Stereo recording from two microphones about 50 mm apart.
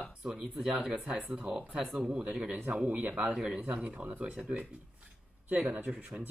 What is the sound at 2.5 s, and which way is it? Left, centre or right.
Speech, right.